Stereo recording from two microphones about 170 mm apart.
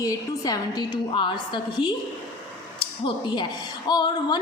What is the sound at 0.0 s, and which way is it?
A woman's voice, 20° left (ahead or behind).